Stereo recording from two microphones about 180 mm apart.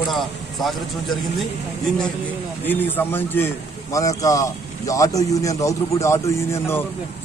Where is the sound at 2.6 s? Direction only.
10° left (ahead or behind).